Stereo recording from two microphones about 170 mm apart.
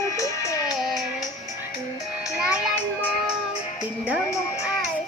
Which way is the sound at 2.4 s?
5° right (ahead or behind).